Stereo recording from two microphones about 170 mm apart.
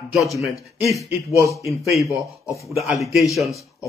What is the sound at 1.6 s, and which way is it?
Speech, centre (ahead or behind).